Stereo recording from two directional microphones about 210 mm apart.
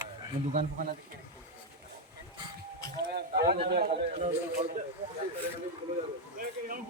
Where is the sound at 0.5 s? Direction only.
40° right (ahead or behind).